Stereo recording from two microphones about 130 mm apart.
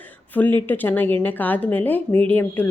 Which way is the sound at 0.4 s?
15° left (ahead or behind).